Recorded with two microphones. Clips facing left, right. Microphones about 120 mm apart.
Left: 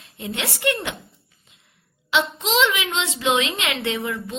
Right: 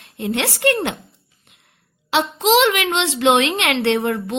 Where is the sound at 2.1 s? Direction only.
90° right; by 4.1 s 75° right (ahead or behind).